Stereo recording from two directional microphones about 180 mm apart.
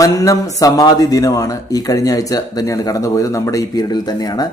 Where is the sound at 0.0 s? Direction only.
20° left (ahead or behind).